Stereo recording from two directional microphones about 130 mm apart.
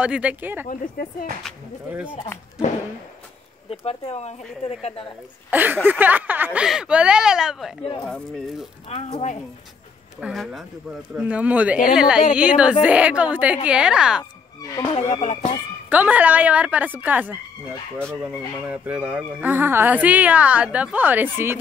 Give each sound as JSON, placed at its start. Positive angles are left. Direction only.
{"t": 0.0, "sound": "speech", "side_deg": -10}
{"t": 3.8, "sound": "speech", "side_deg": 55}
{"t": 5.5, "sound": "speech", "side_deg": -15}
{"t": 10.2, "sound": "speech", "side_deg": 0}
{"t": 15.0, "sound": "speech", "side_deg": 65}
{"t": 15.9, "sound": "speech", "side_deg": -10}